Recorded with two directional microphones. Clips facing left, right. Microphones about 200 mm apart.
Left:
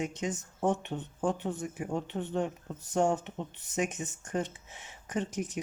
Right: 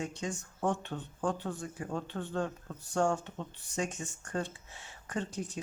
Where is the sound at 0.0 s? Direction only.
20° left (ahead or behind).